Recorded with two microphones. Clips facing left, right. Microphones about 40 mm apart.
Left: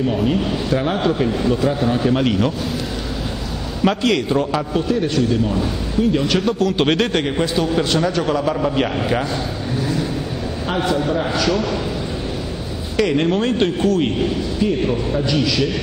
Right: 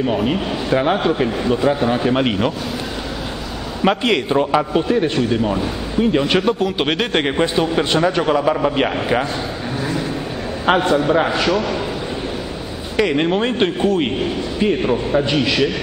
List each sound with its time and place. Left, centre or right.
0.1 s a man's voice: right
3.8 s a man's voice: right
7.2 s a man's voice: right
11.2 s a man's voice: right
12.9 s a man's voice: centre
15.1 s a man's voice: right